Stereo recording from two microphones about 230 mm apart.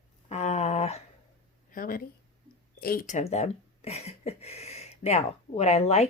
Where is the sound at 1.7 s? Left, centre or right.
Left.